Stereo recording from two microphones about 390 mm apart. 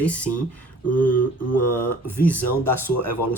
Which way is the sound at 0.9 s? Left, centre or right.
Left.